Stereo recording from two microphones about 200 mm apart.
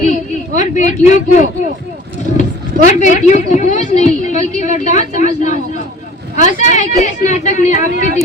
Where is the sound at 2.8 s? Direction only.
40° left (ahead or behind).